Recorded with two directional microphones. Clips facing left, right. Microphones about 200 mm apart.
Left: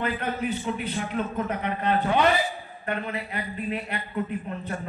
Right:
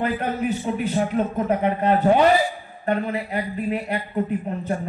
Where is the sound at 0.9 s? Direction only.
40° right (ahead or behind).